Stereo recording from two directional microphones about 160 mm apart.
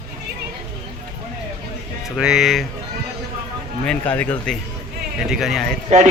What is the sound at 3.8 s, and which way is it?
Speech, 10° left (ahead or behind).